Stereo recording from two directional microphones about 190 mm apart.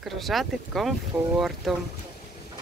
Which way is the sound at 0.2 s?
Centre (ahead or behind).